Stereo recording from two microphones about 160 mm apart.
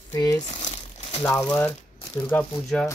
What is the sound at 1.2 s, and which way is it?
Speech, 10° left (ahead or behind).